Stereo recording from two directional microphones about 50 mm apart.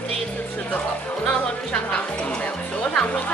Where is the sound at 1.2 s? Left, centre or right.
Centre.